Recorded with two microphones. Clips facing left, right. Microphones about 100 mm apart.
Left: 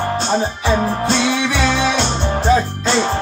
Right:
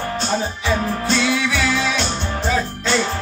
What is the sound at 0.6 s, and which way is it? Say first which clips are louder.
Music: left 4 dB; 30° left (ahead or behind).